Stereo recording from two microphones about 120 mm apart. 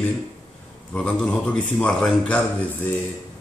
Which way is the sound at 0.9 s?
10° left (ahead or behind).